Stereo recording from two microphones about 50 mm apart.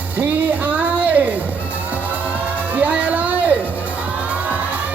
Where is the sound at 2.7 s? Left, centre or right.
Right.